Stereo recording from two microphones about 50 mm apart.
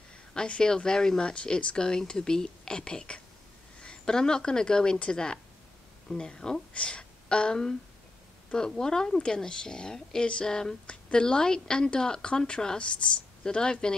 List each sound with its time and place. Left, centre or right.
0.3 s a woman's voice: centre